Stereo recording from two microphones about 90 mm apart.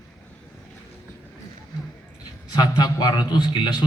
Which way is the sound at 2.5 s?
50° left (ahead or behind).